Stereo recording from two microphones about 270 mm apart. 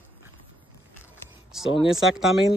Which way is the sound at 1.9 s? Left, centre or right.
Centre.